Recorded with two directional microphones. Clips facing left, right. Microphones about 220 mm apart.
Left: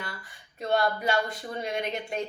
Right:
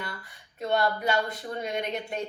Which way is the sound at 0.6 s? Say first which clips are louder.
Even; centre (ahead or behind).